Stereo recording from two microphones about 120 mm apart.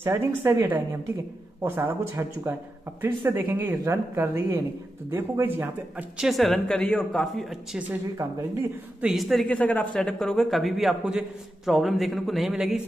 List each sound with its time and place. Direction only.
0.0 s a woman's voice: 20° right (ahead or behind)
6.1 s a man's voice: centre (ahead or behind)
8.2 s a woman's voice: 20° right (ahead or behind)
9.0 s a man's voice: centre (ahead or behind)
9.6 s a man's voice: 10° left (ahead or behind); by 12.8 s 5° right (ahead or behind)